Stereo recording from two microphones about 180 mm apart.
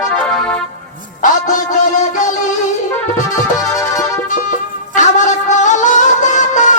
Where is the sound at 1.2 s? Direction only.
45° left (ahead or behind).